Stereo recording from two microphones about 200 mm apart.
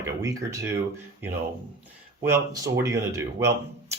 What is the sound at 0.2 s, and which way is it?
Speech, 15° right (ahead or behind).